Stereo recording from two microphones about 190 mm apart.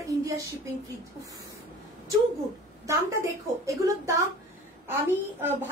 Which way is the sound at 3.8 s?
15° right (ahead or behind).